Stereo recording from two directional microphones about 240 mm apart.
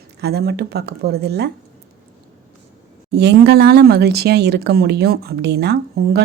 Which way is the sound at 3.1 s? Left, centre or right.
Right.